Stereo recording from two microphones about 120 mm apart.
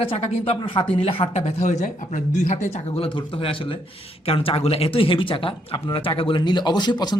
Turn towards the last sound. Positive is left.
turn(degrees=40)  # may be behind; listen again after turning